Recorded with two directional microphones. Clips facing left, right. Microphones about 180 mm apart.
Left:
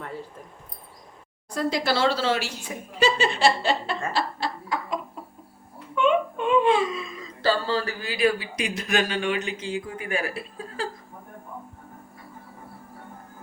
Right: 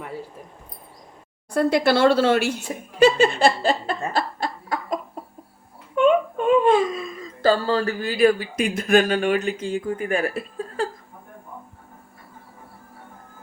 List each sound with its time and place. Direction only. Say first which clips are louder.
1.5 s speech: right 6 dB; 60° right (ahead or behind)
2.6 s chuckle: right 6 dB; 50° right (ahead or behind)
6.0 s speech: right 4 dB; 45° right (ahead or behind)